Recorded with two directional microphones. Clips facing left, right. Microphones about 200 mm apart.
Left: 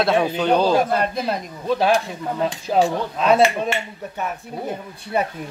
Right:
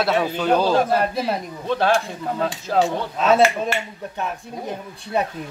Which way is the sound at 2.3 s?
15° left (ahead or behind).